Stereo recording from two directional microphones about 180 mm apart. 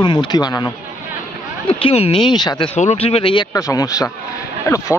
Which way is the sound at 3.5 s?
20° left (ahead or behind).